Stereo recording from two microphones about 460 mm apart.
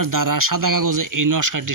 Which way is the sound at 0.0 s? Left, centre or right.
Right.